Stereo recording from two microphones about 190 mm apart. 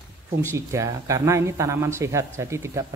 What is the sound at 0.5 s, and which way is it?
A man's voice, 15° right (ahead or behind).